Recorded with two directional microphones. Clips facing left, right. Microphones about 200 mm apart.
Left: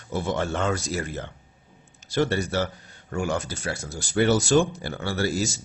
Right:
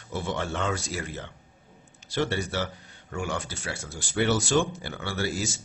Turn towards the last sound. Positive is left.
turn(degrees=40)  # may be behind; listen again after turning